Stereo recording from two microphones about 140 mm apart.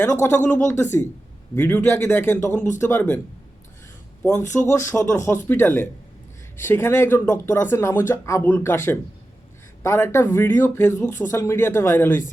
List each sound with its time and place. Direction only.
0.0 s speech: 15° left (ahead or behind)
4.5 s speech: 20° left (ahead or behind)